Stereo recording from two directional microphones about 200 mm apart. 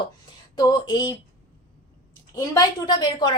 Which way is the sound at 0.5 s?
20° left (ahead or behind).